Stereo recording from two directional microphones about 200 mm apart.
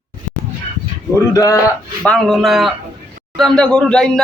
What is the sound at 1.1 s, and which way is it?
Speech, 15° left (ahead or behind).